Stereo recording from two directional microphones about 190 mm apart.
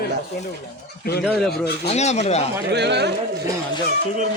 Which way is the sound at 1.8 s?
35° left (ahead or behind).